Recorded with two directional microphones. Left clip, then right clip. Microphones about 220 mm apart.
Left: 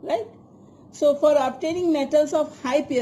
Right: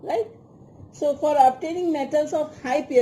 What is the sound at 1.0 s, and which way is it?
A woman's voice, 35° left (ahead or behind).